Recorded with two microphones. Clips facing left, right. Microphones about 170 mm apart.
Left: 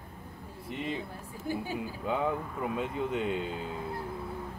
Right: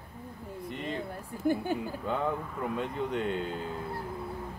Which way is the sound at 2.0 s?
5° left (ahead or behind).